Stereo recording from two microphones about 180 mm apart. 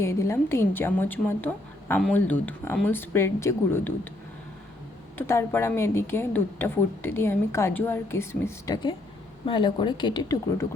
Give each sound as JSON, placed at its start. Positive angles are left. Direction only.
{"t": 0.0, "sound": "a woman's voice", "side_deg": 15}
{"t": 5.1, "sound": "a woman's voice", "side_deg": 15}